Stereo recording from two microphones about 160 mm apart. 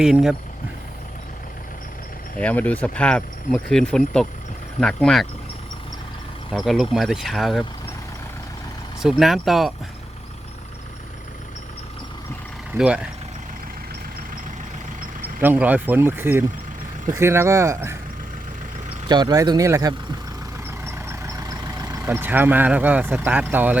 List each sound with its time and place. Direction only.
0.0 s speech: 5° right (ahead or behind)
2.3 s speech: 10° left (ahead or behind)
6.5 s speech: centre (ahead or behind)
9.0 s speech: centre (ahead or behind)
12.7 s speech: 5° right (ahead or behind)
15.4 s speech: 10° right (ahead or behind)
19.0 s speech: 25° right (ahead or behind)
21.9 s speech: 15° right (ahead or behind)